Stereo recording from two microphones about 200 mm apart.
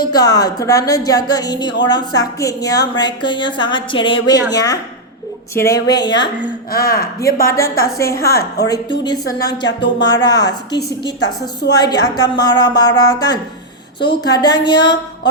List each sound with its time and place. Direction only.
0.1 s a woman's voice: 20° left (ahead or behind)
6.7 s speech: 50° left (ahead or behind)
7.4 s a woman's voice: 15° left (ahead or behind)